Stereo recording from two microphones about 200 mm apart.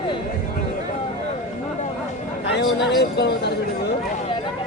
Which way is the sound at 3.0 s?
55° left (ahead or behind).